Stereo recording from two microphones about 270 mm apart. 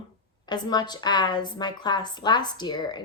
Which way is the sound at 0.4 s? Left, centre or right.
Centre.